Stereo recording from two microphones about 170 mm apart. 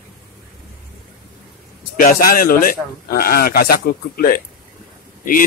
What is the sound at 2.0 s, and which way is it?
A man's voice, 55° left (ahead or behind).